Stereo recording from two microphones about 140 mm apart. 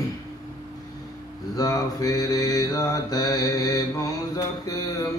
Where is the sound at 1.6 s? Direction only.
25° left (ahead or behind).